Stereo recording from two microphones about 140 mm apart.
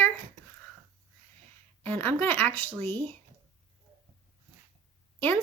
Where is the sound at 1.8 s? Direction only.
10° left (ahead or behind).